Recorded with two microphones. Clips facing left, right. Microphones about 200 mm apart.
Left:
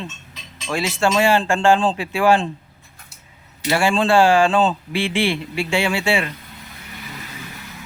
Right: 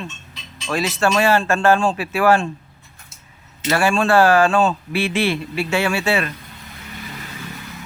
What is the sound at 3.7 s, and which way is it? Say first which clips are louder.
Speech: even; 15° left (ahead or behind).